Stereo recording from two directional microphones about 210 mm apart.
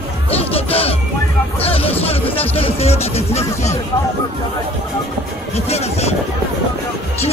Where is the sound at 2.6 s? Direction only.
30° left (ahead or behind).